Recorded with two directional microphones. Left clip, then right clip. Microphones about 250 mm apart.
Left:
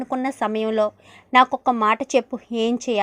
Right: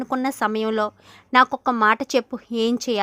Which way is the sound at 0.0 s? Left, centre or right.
Centre.